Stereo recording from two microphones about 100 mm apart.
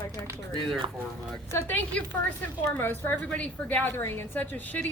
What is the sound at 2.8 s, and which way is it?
A woman's voice, 20° left (ahead or behind).